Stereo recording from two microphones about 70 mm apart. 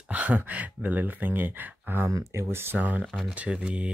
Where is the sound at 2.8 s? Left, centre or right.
Centre.